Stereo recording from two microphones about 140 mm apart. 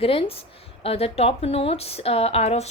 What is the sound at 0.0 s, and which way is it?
Speech, 45° left (ahead or behind).